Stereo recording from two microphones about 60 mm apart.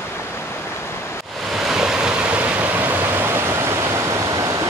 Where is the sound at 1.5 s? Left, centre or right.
Centre; by 4.6 s right.